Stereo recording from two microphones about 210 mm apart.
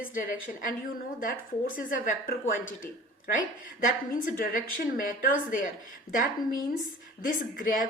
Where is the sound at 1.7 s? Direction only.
40° left (ahead or behind).